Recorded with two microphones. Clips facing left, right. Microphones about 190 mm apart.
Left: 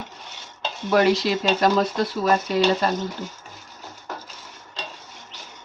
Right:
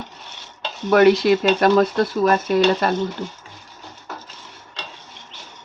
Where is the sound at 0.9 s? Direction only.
55° right (ahead or behind).